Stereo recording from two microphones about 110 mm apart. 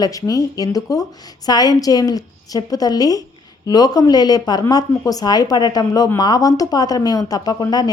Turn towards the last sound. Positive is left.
turn(degrees=35)  # may be behind; listen again after turning